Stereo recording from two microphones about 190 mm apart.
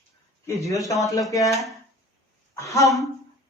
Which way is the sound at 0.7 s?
15° left (ahead or behind).